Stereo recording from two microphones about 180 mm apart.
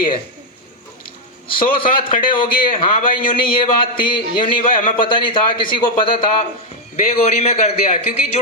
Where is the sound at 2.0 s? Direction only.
30° left (ahead or behind).